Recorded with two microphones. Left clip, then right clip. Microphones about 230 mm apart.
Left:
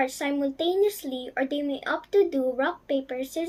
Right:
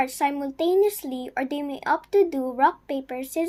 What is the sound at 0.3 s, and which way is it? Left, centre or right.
Speech, right.